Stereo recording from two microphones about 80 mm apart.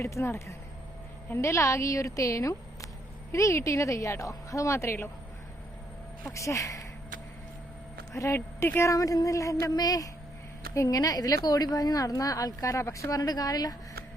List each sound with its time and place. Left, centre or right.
0.0 s a woman's voice: left
6.3 s a woman's voice: left
8.1 s speech: left
8.4 s a woman's voice: left
8.9 s a woman's voice: left